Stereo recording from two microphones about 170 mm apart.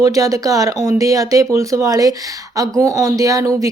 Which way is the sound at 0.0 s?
20° right (ahead or behind).